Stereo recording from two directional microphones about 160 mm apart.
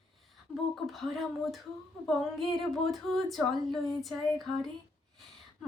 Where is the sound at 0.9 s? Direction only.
Centre (ahead or behind).